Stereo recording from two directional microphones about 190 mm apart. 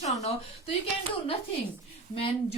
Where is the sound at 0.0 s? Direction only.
35° left (ahead or behind).